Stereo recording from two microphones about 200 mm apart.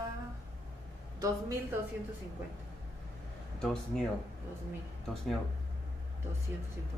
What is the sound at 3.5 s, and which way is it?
Speech, centre (ahead or behind).